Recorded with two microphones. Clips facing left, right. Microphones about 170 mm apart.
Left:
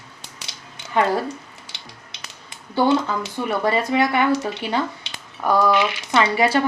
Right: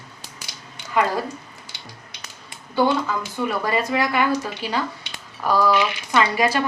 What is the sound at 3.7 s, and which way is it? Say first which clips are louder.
Speech: left 5 dB; 25° left (ahead or behind).